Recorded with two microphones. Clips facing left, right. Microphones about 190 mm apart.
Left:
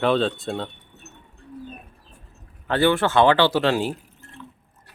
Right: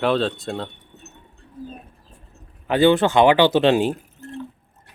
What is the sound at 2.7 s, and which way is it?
Speech, 20° right (ahead or behind).